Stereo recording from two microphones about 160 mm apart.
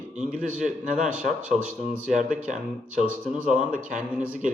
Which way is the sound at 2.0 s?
50° right (ahead or behind).